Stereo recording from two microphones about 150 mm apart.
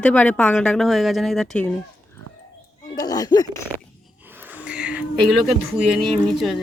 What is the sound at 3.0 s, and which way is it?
Speech, 25° left (ahead or behind).